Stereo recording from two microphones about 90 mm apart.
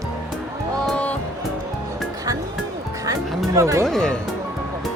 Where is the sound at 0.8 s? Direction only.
15° left (ahead or behind).